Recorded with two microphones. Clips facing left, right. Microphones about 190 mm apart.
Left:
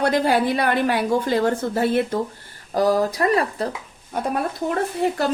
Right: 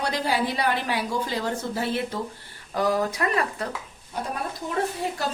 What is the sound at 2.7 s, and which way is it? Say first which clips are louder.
Speech: left 5 dB; 35° left (ahead or behind).